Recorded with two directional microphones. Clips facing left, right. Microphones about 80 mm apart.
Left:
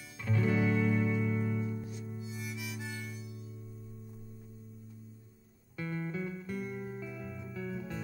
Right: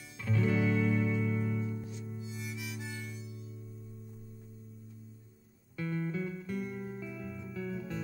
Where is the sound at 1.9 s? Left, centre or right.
Left.